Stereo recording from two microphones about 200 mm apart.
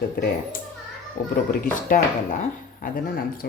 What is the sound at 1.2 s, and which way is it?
Speech, 45° left (ahead or behind).